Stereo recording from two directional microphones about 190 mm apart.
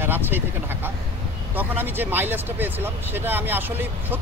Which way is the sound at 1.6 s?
10° right (ahead or behind).